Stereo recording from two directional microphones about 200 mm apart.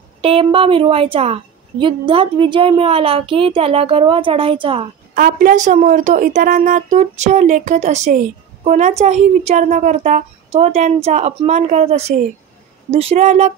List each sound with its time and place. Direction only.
0.2 s a woman's voice: 25° right (ahead or behind)
5.1 s a woman's voice: 45° right (ahead or behind)